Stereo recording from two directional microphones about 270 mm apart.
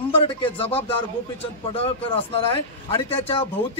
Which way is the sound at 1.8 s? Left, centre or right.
Left.